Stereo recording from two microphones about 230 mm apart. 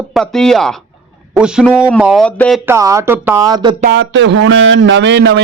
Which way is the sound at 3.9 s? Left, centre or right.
Right.